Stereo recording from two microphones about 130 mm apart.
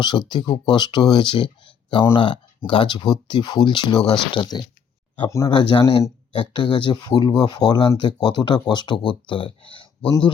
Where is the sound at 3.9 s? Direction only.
5° left (ahead or behind).